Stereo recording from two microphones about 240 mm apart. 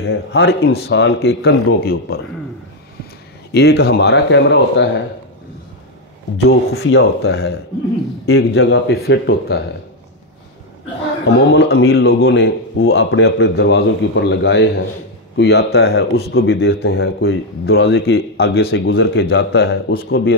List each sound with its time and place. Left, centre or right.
0.0 s a man's voice: left
3.5 s a man's voice: left
6.7 s a man's voice: left
11.2 s a man's voice: left
16.9 s speech: left
17.8 s speech: left
18.7 s a man's voice: left